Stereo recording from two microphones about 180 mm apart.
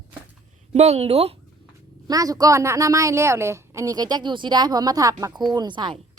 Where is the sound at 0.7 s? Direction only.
35° right (ahead or behind).